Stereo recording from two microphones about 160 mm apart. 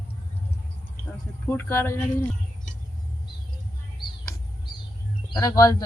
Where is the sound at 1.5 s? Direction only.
15° left (ahead or behind).